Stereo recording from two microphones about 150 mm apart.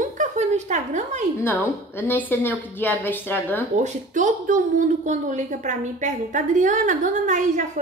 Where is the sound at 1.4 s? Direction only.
15° left (ahead or behind).